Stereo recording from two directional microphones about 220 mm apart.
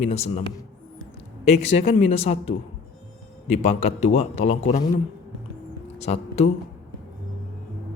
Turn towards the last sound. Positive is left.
turn(degrees=30)  # may be behind; listen again after turning